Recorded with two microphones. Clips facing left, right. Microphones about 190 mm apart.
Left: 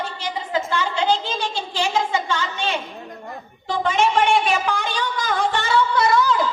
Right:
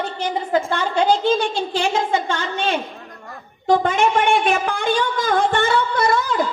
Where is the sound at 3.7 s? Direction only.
55° right (ahead or behind).